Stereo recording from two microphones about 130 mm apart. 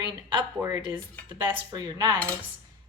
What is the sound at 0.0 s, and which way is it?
Speech, 35° right (ahead or behind).